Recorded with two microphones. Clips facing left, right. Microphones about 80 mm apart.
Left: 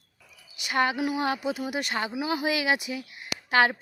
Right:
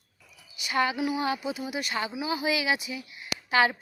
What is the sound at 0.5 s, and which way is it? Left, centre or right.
Speech, left.